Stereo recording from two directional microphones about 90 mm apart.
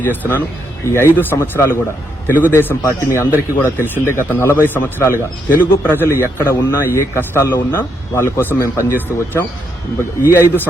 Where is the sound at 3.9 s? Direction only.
25° left (ahead or behind).